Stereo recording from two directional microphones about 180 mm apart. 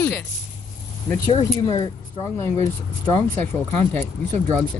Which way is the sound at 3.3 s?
45° right (ahead or behind).